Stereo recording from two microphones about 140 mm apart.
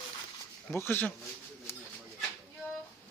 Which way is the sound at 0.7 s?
15° left (ahead or behind).